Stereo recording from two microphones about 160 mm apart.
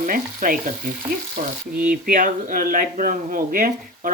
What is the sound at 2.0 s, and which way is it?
Speech, 55° right (ahead or behind).